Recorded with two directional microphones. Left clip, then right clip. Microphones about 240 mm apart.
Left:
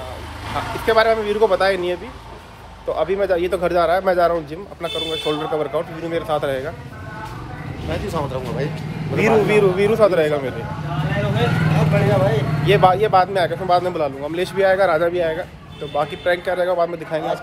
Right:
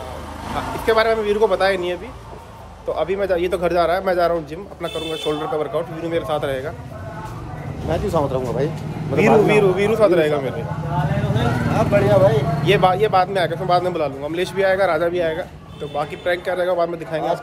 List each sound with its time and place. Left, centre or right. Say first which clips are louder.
0.6 s speech: left 1 dB; centre
7.9 s speech: right 4 dB; centre
11.9 s speech: right 4 dB; centre